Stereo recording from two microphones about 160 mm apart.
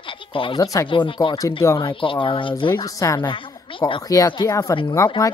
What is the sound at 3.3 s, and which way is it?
Speech, 30° left (ahead or behind).